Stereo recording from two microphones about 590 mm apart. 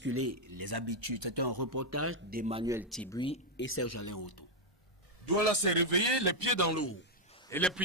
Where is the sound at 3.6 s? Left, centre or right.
Left.